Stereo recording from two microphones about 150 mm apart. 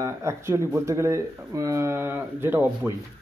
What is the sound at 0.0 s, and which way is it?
Speech, 20° right (ahead or behind).